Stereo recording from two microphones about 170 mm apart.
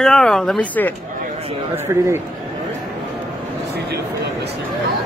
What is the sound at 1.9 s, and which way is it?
Speech, 20° right (ahead or behind).